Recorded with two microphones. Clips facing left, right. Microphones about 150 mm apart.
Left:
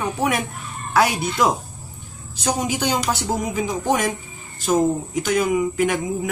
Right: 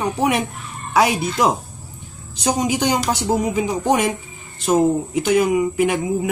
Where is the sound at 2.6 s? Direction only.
10° right (ahead or behind).